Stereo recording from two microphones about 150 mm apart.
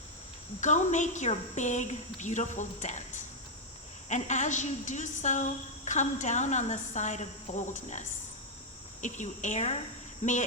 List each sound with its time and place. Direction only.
0.6 s a woman's voice: 55° left (ahead or behind)